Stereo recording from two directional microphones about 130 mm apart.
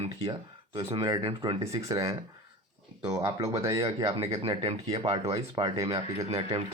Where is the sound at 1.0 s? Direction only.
35° right (ahead or behind).